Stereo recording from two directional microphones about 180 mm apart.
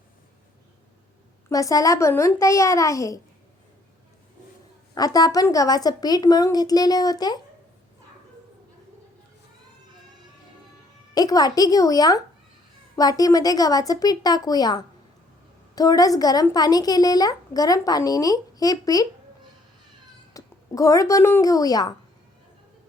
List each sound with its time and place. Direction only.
1.5 s a child's voice: 20° left (ahead or behind)
4.9 s speech: 20° left (ahead or behind)
11.1 s speech: 20° left (ahead or behind)
20.3 s speech: 20° left (ahead or behind)